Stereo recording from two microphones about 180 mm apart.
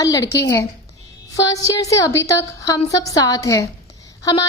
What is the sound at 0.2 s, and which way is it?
Speech, 65° left (ahead or behind).